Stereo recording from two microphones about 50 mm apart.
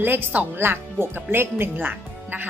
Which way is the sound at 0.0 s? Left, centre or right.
Right.